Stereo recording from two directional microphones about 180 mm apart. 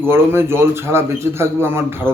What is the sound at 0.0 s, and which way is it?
Speech, 15° right (ahead or behind).